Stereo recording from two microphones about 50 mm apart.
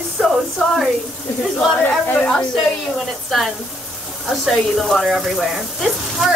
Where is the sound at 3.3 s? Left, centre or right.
Centre.